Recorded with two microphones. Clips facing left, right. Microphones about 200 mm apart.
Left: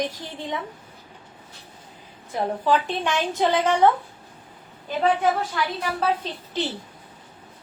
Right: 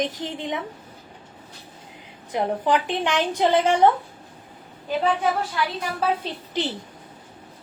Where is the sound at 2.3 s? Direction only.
20° right (ahead or behind).